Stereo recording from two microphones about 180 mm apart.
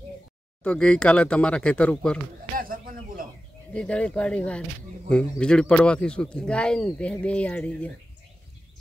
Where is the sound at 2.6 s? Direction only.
50° right (ahead or behind).